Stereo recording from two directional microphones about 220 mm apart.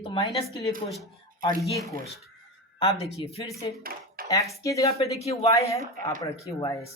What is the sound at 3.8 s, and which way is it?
Dishes, 40° right (ahead or behind).